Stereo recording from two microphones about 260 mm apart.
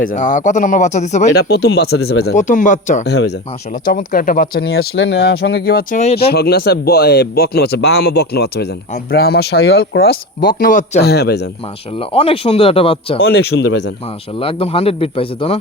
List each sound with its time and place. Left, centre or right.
0.0 s a man's voice: left
1.4 s a man's voice: left
3.1 s speech: left
11.9 s a man's voice: left
13.2 s speech: left
14.3 s a man's voice: left